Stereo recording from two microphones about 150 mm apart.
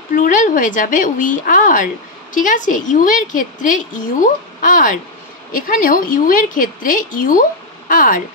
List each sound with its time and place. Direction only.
0.1 s a woman's voice: 60° left (ahead or behind)